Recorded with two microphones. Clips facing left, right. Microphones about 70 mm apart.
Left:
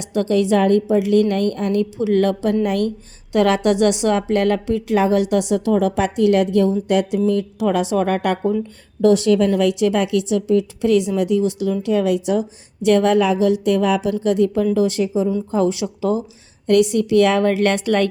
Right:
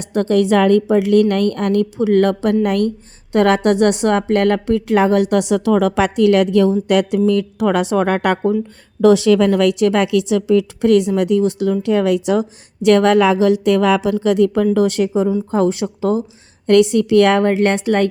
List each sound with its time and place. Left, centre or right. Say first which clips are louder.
0.0 s a woman's voice: right 3 dB; right
9.0 s a woman's voice: right 3 dB; right
10.8 s a woman's voice: right 3 dB; right
15.5 s speech: right 1 dB; right
16.6 s a woman's voice: right 3 dB; right
17.3 s speech: right 2 dB; right